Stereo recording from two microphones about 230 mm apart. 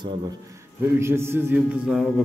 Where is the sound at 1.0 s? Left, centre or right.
Centre.